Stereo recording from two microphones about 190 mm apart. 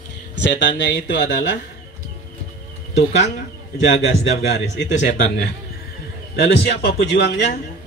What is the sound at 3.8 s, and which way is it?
Speech, 60° left (ahead or behind).